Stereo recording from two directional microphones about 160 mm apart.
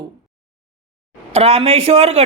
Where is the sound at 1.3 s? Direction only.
40° right (ahead or behind).